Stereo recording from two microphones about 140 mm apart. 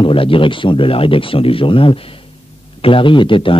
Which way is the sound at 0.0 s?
40° left (ahead or behind).